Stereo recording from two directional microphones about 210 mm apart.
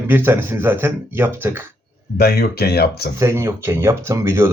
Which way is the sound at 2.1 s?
45° left (ahead or behind).